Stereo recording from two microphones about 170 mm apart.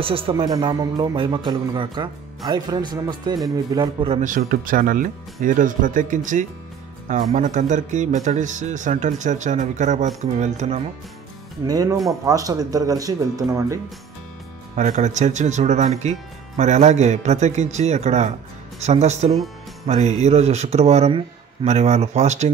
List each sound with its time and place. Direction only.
0.0 s speech: 35° right (ahead or behind)
4.1 s speech: 50° right (ahead or behind)
11.6 s speech: 20° right (ahead or behind)
14.8 s speech: 45° right (ahead or behind)